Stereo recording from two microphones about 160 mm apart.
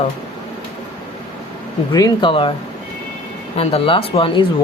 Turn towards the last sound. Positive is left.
turn(degrees=35)  # may be behind; listen again after turning